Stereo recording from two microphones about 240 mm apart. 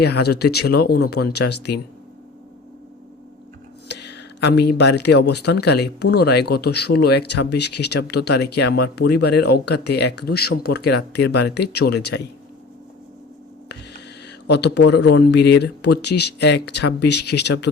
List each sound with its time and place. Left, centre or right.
0.0 s speech: left
3.8 s a sound: left
5.2 s speech: left
14.4 s speech: left